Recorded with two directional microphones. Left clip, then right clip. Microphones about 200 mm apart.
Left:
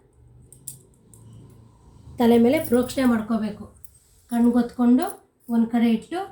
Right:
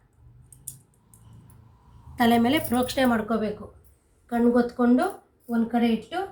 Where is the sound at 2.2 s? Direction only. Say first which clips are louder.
Left 4 dB; 40° right (ahead or behind).